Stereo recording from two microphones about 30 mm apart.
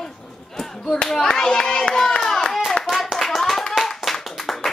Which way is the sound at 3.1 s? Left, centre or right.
Centre.